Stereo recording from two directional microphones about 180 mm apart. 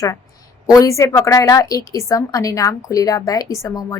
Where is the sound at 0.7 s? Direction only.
20° left (ahead or behind).